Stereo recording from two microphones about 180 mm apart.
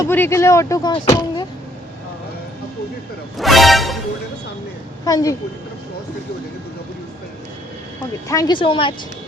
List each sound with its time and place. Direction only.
0.0 s speech: 15° left (ahead or behind)
3.3 s speech: centre (ahead or behind)
5.0 s speech: 20° left (ahead or behind)
8.3 s speech: 20° left (ahead or behind)